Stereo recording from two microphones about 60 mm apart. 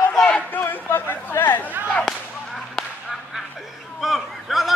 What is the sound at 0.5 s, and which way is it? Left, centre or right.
Chatter, left.